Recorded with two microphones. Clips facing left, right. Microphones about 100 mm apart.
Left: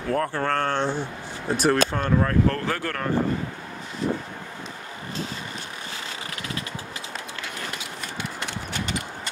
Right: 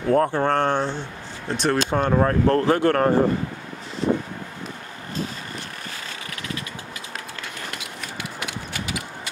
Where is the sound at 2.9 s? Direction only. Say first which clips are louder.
Right 9 dB; 40° right (ahead or behind).